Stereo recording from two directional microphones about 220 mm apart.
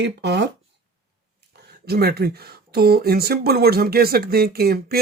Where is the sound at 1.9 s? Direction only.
45° right (ahead or behind).